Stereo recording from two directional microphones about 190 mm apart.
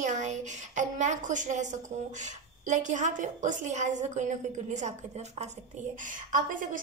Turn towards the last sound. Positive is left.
turn(degrees=-45)  # may be behind; listen again after turning